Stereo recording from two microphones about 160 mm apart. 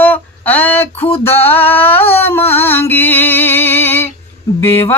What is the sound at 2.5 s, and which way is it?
Music, 15° left (ahead or behind).